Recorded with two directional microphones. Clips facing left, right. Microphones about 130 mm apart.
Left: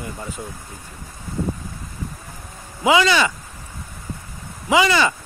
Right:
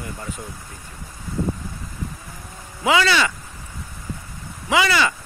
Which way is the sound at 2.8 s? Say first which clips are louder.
Left 2 dB; 20° left (ahead or behind).